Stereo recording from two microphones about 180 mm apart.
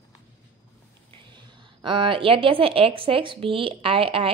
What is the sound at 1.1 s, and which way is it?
A woman's voice, 25° right (ahead or behind).